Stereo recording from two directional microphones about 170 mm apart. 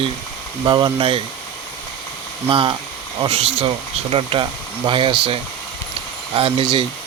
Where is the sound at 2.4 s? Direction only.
30° right (ahead or behind).